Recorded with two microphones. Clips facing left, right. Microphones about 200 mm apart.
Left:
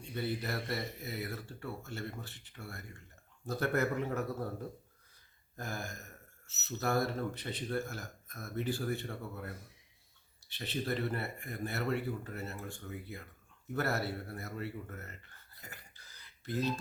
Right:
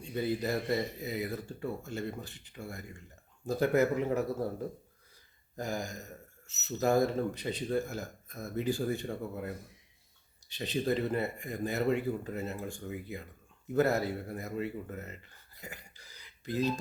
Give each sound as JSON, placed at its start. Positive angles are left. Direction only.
{"t": 0.1, "sound": "speech", "side_deg": -15}
{"t": 5.5, "sound": "speech", "side_deg": -15}
{"t": 10.6, "sound": "speech", "side_deg": -15}
{"t": 13.7, "sound": "speech", "side_deg": -15}
{"t": 15.6, "sound": "a sound", "side_deg": -15}